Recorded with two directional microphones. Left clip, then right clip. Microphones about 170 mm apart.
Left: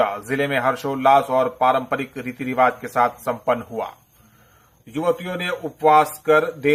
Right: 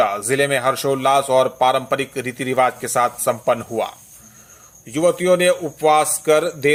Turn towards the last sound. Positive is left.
turn(degrees=-40)  # may be behind; listen again after turning